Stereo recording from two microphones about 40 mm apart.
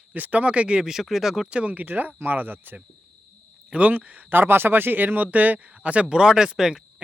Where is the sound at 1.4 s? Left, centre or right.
Right.